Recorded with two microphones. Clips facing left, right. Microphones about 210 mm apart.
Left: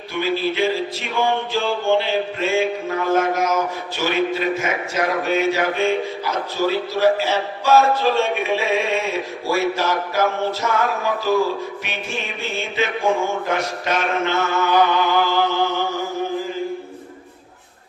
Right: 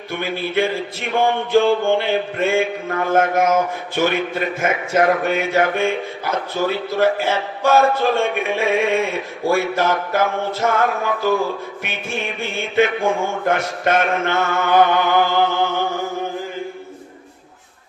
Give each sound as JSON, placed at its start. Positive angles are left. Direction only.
{"t": 0.1, "sound": "music", "side_deg": -55}